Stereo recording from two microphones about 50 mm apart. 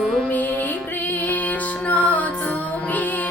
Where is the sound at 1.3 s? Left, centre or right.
Left.